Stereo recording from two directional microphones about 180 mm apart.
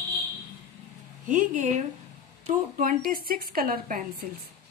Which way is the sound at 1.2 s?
45° right (ahead or behind).